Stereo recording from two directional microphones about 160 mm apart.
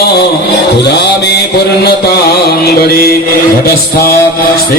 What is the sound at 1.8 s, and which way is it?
Mantra, 85° left.